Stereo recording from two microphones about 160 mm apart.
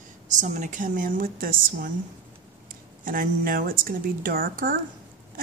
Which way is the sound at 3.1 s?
60° right (ahead or behind).